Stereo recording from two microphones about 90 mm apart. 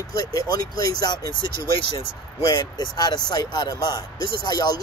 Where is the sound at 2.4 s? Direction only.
55° left (ahead or behind).